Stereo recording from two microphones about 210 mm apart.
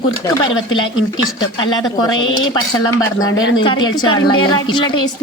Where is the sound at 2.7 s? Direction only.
20° left (ahead or behind).